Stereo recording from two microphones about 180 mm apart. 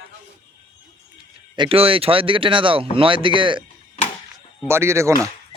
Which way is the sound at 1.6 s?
30° right (ahead or behind).